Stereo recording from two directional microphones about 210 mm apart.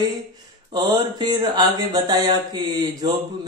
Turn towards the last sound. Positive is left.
turn(degrees=-20)  # may be behind; listen again after turning